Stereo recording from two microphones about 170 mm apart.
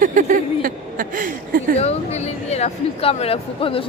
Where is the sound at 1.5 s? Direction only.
55° right (ahead or behind).